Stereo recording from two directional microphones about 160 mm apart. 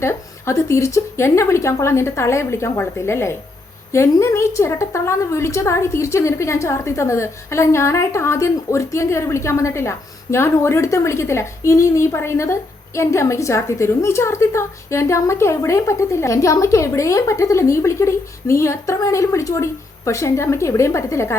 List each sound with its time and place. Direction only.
0.0 s a woman's voice: 15° left (ahead or behind)